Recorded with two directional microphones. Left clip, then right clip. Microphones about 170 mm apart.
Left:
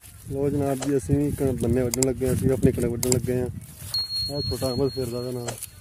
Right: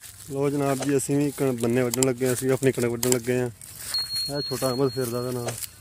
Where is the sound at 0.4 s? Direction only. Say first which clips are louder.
Right 1 dB; 5° left (ahead or behind).